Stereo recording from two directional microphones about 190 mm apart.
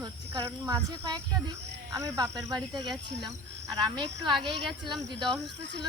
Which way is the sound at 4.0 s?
25° right (ahead or behind).